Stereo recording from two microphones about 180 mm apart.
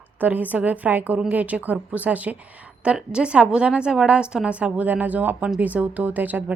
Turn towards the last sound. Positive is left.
turn(degrees=-10)  # may be behind; listen again after turning